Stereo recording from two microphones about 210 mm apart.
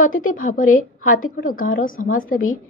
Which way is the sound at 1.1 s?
40° left (ahead or behind).